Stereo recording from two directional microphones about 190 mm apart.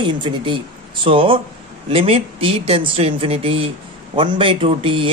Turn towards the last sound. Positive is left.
turn(degrees=-30)  # may be behind; listen again after turning